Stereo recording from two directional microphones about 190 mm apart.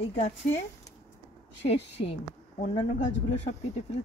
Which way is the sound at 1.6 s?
35° left (ahead or behind).